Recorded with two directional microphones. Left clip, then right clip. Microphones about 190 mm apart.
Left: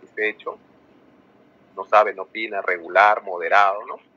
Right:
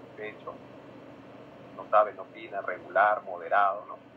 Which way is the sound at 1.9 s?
60° left (ahead or behind).